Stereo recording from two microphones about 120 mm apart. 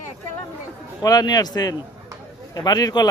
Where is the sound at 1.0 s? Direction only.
30° left (ahead or behind).